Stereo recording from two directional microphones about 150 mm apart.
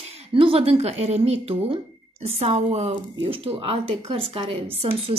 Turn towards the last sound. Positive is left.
turn(degrees=-40)  # may be behind; listen again after turning